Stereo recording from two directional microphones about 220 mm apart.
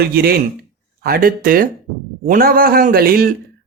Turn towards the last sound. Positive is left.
turn(degrees=-40)  # may be behind; listen again after turning